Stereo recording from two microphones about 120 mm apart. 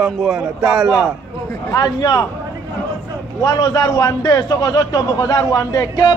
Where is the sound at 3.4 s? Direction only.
35° left (ahead or behind).